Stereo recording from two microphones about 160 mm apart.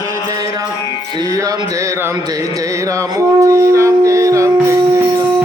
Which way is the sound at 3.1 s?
20° right (ahead or behind).